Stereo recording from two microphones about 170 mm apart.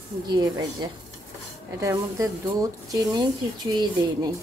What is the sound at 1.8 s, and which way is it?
Speech, 20° right (ahead or behind).